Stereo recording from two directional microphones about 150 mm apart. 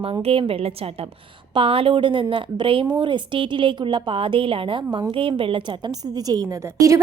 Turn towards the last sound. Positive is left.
turn(degrees=-20)  # may be behind; listen again after turning